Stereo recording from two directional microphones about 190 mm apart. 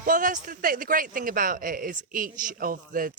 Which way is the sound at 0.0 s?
45° right (ahead or behind).